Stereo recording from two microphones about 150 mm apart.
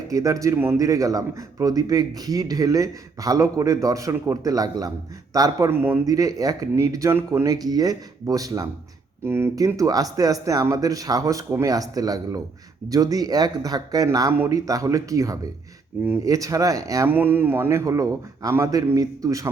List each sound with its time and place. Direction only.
0.1 s a man's voice: 20° right (ahead or behind)